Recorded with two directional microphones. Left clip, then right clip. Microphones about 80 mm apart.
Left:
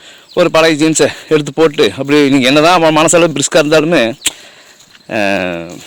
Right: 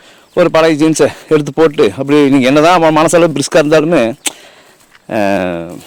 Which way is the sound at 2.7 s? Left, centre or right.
Right.